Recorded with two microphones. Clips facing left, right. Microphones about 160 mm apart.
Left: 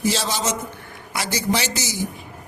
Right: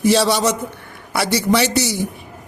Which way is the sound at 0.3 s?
60° right (ahead or behind).